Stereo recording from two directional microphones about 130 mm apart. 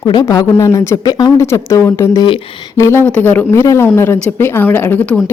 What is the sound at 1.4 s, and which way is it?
A woman's voice, 20° left (ahead or behind).